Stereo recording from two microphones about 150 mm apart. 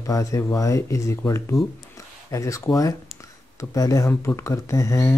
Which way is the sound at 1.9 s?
20° left (ahead or behind).